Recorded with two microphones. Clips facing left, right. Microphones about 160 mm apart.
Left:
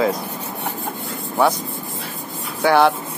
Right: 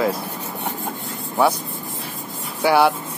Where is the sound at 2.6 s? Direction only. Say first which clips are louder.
Left 1 dB; 10° right (ahead or behind).